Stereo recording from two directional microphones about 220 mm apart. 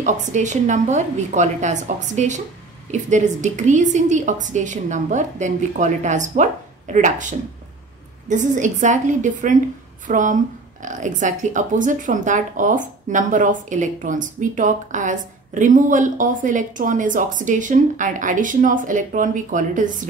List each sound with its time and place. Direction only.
0.0 s a woman's voice: 35° right (ahead or behind)